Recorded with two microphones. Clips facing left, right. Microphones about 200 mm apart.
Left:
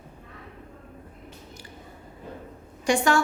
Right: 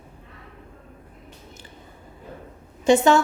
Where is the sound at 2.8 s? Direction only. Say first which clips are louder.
Right 6 dB; 25° right (ahead or behind).